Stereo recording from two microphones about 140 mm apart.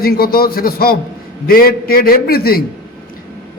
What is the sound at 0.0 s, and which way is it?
A man's voice, 90° left.